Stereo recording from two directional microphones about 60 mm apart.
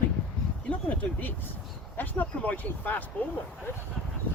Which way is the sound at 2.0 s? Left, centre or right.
Left.